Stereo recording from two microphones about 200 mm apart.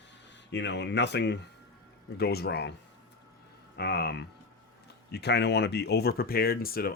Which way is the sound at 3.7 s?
55° left (ahead or behind).